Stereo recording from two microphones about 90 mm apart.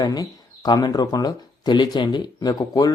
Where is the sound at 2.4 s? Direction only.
40° left (ahead or behind).